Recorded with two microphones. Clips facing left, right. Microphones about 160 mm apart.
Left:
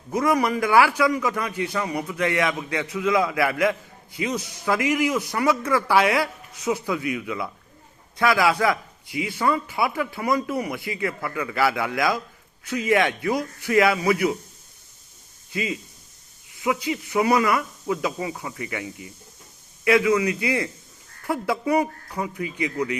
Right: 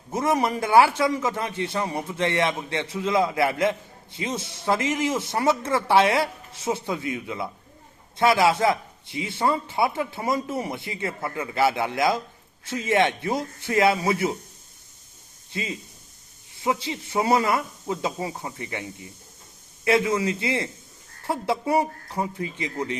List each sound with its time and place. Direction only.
0.1 s a man's voice: 25° right (ahead or behind)
16.6 s a man's voice: 25° right (ahead or behind)